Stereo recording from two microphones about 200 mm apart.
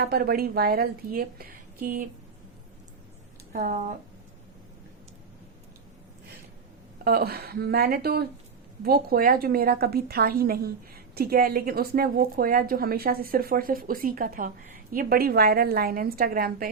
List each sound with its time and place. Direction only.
0.0 s a woman's voice: 50° right (ahead or behind)
3.5 s speech: 35° right (ahead or behind)
7.0 s a woman's voice: 50° right (ahead or behind)